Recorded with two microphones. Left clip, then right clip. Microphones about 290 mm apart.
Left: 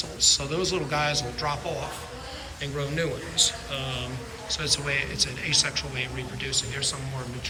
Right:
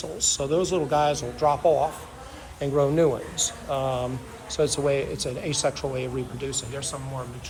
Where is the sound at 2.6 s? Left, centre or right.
Centre.